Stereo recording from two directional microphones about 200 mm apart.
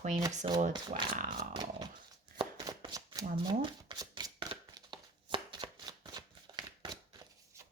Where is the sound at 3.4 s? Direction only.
20° right (ahead or behind).